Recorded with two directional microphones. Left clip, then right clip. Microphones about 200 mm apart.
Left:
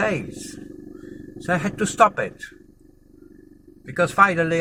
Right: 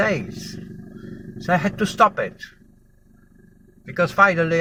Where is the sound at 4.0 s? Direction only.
25° left (ahead or behind).